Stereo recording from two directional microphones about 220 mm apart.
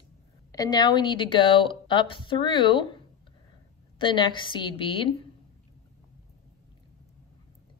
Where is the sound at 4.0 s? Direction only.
20° left (ahead or behind).